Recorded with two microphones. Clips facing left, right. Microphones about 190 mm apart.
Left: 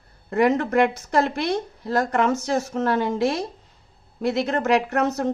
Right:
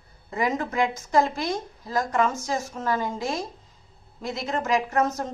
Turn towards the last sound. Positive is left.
turn(degrees=70)  # may be behind; listen again after turning